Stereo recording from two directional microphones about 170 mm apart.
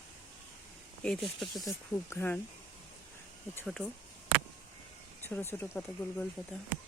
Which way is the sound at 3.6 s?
5° left (ahead or behind).